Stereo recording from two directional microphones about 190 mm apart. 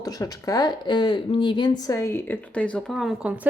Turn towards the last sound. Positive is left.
turn(degrees=-5)  # may be behind; listen again after turning